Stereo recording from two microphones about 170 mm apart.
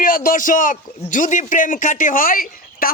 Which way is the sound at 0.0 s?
55° left (ahead or behind).